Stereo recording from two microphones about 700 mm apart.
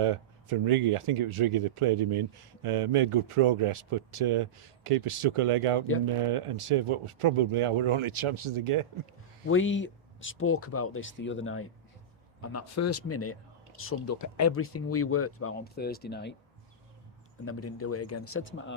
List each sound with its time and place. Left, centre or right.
0.0 s speech: right
9.5 s speech: centre
17.4 s speech: centre